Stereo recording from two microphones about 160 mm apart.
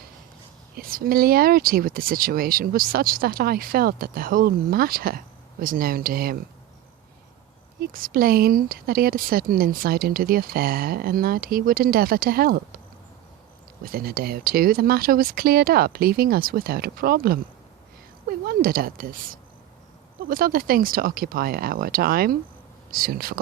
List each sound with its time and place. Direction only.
0.8 s speech: 65° right (ahead or behind)
7.8 s a woman's voice: 65° right (ahead or behind)
13.8 s a woman's voice: 70° right (ahead or behind)